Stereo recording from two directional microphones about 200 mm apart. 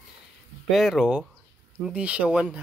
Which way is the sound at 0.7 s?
Centre (ahead or behind).